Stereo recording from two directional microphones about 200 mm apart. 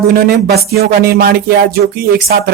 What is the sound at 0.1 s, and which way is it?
Speech, 55° right (ahead or behind).